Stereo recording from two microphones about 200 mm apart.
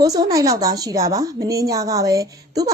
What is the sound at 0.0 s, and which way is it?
A woman's voice, 20° right (ahead or behind).